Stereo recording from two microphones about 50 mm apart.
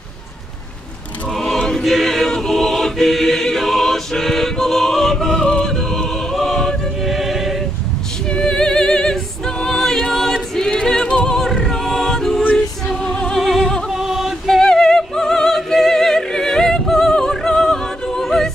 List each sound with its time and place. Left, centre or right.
1.3 s choir: centre
6.3 s choir: centre
7.0 s music: centre
8.3 s music: centre
11.3 s music: centre
12.9 s music: centre
13.4 s music: centre
13.9 s a sound: centre
14.4 s music: centre